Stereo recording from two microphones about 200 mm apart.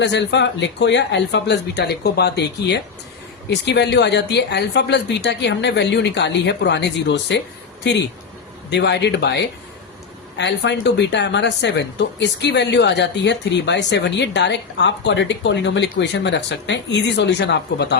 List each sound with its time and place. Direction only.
0.0 s speech: 60° left (ahead or behind)